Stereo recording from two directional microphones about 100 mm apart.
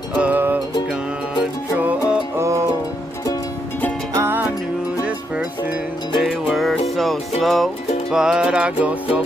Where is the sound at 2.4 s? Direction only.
30° right (ahead or behind).